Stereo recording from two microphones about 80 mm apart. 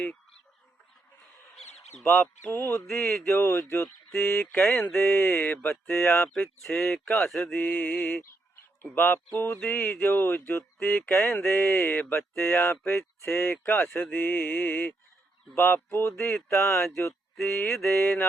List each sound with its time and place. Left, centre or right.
1.5 s a sound: centre
2.5 s speech: left
2.8 s speech: centre
3.2 s speech: left
3.8 s speech: centre
5.3 s speech: left
5.8 s speech: centre
8.8 s speech: left
9.6 s speech: centre
10.8 s speech: centre
15.5 s speech: left
16.5 s speech: centre